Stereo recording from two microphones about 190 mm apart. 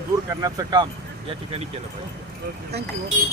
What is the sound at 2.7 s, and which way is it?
Speech, 60° right (ahead or behind).